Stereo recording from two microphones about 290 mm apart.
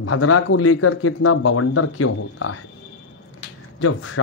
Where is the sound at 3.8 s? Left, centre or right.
Left.